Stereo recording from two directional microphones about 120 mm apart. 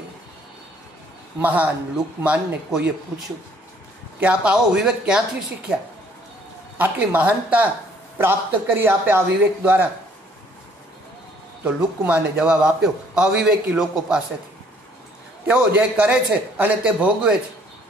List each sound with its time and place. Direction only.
1.4 s a man's voice: 15° right (ahead or behind)
4.2 s a man's voice: 10° right (ahead or behind)
6.8 s a man's voice: 15° right (ahead or behind)
11.6 s a man's voice: 10° right (ahead or behind)
15.4 s a man's voice: 15° right (ahead or behind)